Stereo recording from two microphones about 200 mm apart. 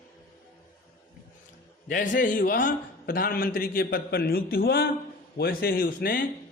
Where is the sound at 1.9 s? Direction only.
45° left (ahead or behind).